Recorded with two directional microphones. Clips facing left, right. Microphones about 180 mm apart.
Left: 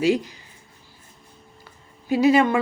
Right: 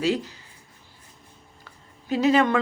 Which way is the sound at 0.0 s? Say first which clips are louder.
Left 4 dB; 10° left (ahead or behind).